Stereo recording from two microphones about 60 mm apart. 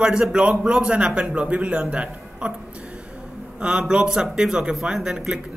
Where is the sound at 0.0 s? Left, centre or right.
Centre.